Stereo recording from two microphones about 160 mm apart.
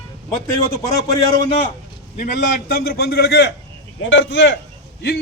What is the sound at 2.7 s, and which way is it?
Speech, 70° left (ahead or behind).